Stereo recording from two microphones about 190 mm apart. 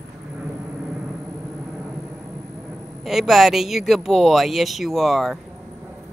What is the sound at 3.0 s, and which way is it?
Speech, centre (ahead or behind).